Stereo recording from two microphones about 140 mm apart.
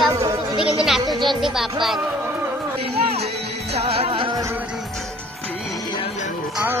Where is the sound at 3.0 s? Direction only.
45° right (ahead or behind).